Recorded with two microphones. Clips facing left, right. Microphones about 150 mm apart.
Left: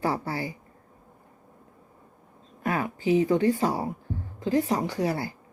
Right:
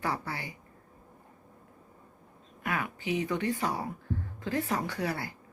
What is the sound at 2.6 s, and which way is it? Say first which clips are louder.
A woman's voice: left 7 dB; 35° left (ahead or behind).